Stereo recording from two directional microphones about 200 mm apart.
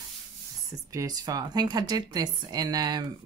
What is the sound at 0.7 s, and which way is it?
Speech, 15° right (ahead or behind).